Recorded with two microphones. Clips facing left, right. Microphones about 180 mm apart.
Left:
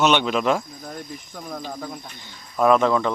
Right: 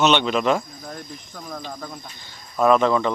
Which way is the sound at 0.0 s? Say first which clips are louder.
Right 1 dB; 5° left (ahead or behind).